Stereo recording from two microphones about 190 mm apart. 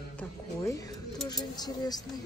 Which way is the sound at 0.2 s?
15° left (ahead or behind).